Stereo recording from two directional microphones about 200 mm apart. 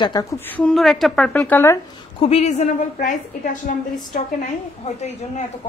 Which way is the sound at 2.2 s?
30° left (ahead or behind).